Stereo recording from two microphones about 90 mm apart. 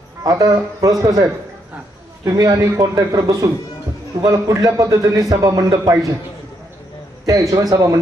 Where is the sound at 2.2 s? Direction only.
45° right (ahead or behind).